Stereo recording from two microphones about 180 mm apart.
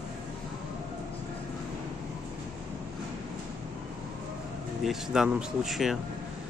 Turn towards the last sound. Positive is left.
turn(degrees=0)  # may be behind; listen again after turning